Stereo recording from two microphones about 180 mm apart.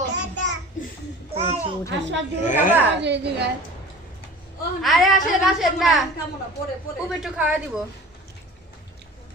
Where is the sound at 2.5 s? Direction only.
45° left (ahead or behind).